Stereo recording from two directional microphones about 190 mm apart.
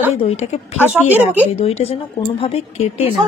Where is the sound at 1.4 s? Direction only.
35° left (ahead or behind).